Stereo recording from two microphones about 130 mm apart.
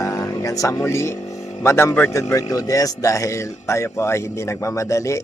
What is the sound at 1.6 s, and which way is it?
Speech, 20° left (ahead or behind).